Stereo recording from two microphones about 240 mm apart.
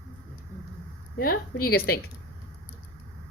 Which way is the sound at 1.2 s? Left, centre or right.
Left.